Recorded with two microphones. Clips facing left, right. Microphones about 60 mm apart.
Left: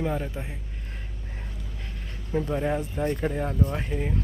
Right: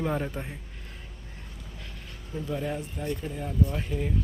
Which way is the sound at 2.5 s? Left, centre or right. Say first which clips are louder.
Left 3 dB; left.